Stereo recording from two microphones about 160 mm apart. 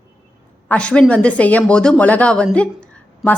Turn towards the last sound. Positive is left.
turn(degrees=5)  # may be behind; listen again after turning